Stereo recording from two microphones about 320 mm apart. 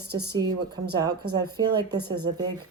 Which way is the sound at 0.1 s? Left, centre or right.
Right.